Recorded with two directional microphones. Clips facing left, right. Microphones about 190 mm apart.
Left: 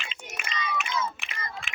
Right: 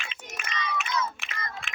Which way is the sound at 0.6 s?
Centre (ahead or behind).